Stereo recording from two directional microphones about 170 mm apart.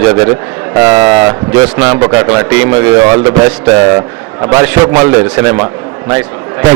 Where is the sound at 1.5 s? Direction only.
15° right (ahead or behind).